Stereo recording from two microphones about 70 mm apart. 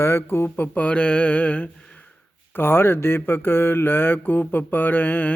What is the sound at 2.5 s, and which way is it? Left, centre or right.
Speech, left.